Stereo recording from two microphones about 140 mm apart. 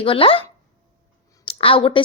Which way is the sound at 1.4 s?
40° left (ahead or behind).